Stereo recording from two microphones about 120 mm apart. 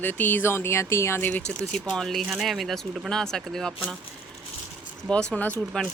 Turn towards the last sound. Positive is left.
turn(degrees=10)  # may be behind; listen again after turning